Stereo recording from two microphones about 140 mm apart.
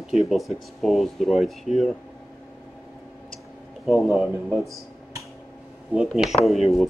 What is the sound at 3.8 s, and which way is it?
Speech, centre (ahead or behind).